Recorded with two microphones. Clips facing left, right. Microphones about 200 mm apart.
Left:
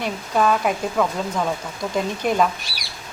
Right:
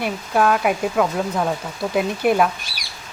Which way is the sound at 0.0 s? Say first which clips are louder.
Right 1 dB; 5° right (ahead or behind).